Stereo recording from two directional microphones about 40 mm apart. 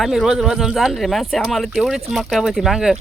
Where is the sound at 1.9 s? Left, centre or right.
Centre.